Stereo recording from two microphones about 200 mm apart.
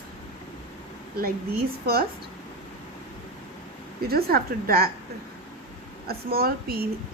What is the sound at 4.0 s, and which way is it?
Speech, 50° right (ahead or behind).